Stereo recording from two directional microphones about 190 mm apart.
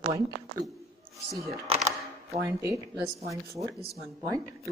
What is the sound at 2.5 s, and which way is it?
Speech, 15° right (ahead or behind).